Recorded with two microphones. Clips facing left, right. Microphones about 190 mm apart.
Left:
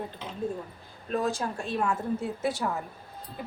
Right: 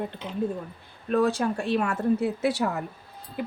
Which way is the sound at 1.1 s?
65° right (ahead or behind).